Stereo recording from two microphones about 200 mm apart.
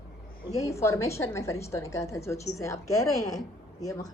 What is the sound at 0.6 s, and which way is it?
A woman's voice, 15° left (ahead or behind).